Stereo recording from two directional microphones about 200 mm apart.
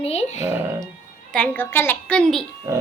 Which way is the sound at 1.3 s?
5° left (ahead or behind).